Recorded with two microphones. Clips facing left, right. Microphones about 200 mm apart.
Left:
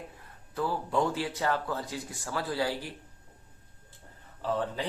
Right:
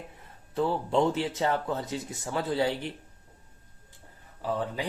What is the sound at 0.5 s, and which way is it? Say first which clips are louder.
Speech: right 4 dB; 25° right (ahead or behind).